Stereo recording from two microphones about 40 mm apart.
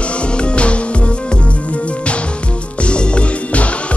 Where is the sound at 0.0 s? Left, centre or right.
Left.